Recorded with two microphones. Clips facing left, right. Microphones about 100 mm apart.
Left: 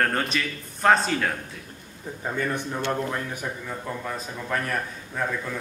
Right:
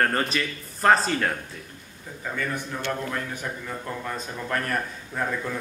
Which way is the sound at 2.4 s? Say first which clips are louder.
Left 3 dB; 25° left (ahead or behind).